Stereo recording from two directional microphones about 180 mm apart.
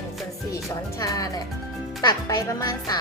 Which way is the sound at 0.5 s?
20° left (ahead or behind).